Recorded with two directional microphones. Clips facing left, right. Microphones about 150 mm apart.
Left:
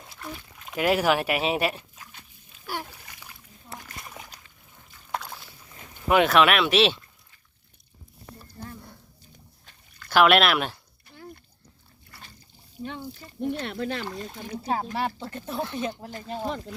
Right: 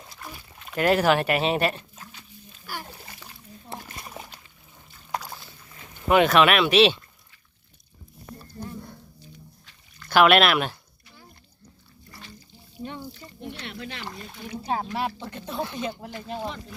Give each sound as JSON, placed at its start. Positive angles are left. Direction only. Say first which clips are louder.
{"t": 0.1, "sound": "dog", "louder": "left 5 dB", "side_deg": 0}
{"t": 0.7, "sound": "speech", "louder": "right 2 dB", "side_deg": 10}
{"t": 2.8, "sound": "splash", "louder": "right 3 dB", "side_deg": -30}
{"t": 5.1, "sound": "boat", "louder": "right 1 dB", "side_deg": 0}
{"t": 6.1, "sound": "speech", "louder": "right 1 dB", "side_deg": 0}
{"t": 10.1, "sound": "speech", "louder": "right 1 dB", "side_deg": 0}
{"t": 12.8, "sound": "speech", "louder": "even", "side_deg": -15}
{"t": 13.4, "sound": "speech", "louder": "left 8 dB", "side_deg": 45}
{"t": 14.9, "sound": "speech", "louder": "even", "side_deg": 0}